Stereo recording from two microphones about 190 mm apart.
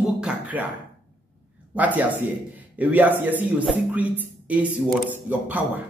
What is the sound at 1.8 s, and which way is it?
A man's voice, 10° right (ahead or behind).